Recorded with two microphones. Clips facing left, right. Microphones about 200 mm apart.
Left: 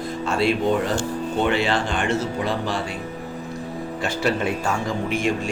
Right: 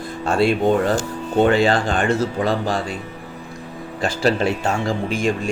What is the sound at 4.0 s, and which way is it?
Speech, 90° right.